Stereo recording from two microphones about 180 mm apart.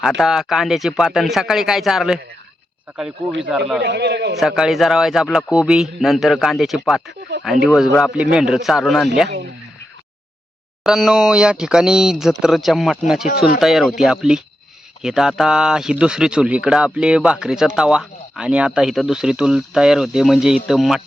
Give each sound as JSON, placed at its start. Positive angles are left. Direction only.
{"t": 0.2, "sound": "speech", "side_deg": 0}
{"t": 3.5, "sound": "speech", "side_deg": -5}
{"t": 3.8, "sound": "a man's voice", "side_deg": -70}
{"t": 4.4, "sound": "speech", "side_deg": 0}
{"t": 10.8, "sound": "speech", "side_deg": 0}